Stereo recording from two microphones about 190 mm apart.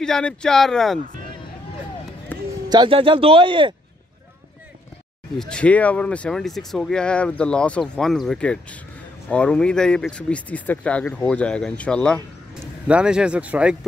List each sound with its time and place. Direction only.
0.0 s speech: 5° left (ahead or behind)
2.7 s speech: 25° right (ahead or behind)
5.4 s speech: 5° left (ahead or behind)